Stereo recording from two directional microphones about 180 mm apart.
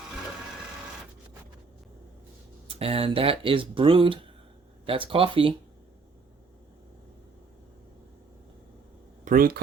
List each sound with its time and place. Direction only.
2.6 s speech: 35° right (ahead or behind)
9.2 s speech: 50° right (ahead or behind)